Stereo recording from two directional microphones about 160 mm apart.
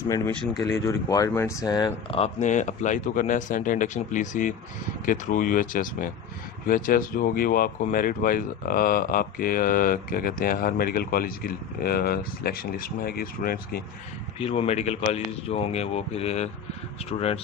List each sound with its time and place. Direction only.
0.5 s speech: 20° left (ahead or behind)
2.1 s speech: 45° left (ahead or behind); by 13.8 s 70° left (ahead or behind)
14.3 s speech: 35° left (ahead or behind)